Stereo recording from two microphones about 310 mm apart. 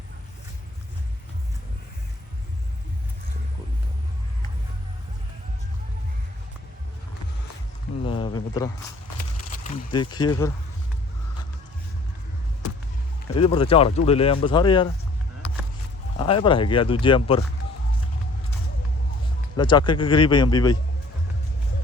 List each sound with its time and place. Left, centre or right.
8.0 s a sound: centre
9.5 s speech: centre
13.3 s speech: centre
16.1 s speech: centre
19.5 s speech: centre